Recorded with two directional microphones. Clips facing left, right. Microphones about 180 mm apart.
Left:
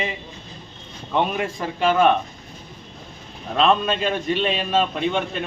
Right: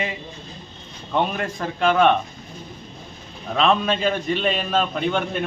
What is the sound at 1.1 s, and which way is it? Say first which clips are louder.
A man's voice: left 1 dB; 5° left (ahead or behind).